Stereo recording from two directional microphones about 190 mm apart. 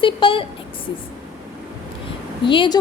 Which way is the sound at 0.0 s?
25° left (ahead or behind).